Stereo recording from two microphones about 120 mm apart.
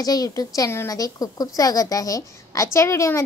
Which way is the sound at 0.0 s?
30° left (ahead or behind).